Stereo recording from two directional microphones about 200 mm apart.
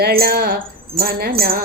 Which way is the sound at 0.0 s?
50° right (ahead or behind).